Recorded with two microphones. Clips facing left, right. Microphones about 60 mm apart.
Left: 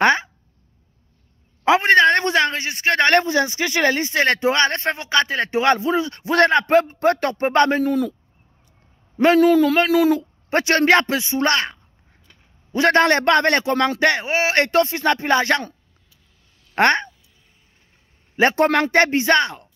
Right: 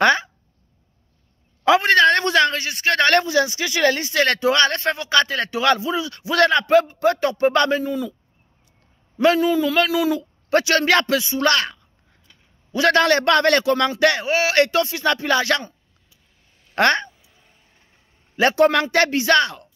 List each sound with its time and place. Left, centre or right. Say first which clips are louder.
0.0 s a man's voice: even; left
1.6 s a man's voice: left 1 dB; left
5.8 s a man's voice: left 3 dB; left
7.8 s speech: left 5 dB; left
9.2 s a man's voice: left 3 dB; left
16.7 s speech: left 1 dB; left
18.3 s a man's voice: even; left